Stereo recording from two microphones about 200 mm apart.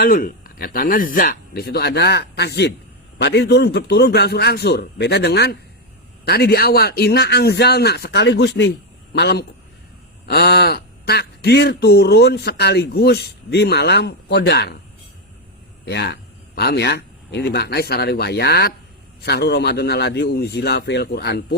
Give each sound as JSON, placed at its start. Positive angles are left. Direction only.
{"t": 0.0, "sound": "speech", "side_deg": 45}
{"t": 15.9, "sound": "speech", "side_deg": 55}